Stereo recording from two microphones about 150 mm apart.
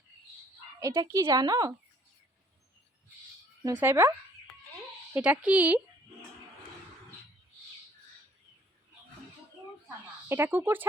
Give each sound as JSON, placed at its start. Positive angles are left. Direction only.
{"t": 0.8, "sound": "speech", "side_deg": -20}
{"t": 3.8, "sound": "speech", "side_deg": -15}
{"t": 5.1, "sound": "speech", "side_deg": -10}
{"t": 10.2, "sound": "speech", "side_deg": -15}